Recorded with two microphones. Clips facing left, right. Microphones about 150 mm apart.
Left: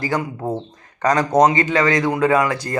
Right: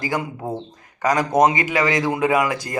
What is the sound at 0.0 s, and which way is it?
Speech, 15° right (ahead or behind).